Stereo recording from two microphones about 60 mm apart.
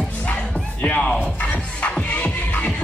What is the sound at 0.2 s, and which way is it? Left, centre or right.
Music, left.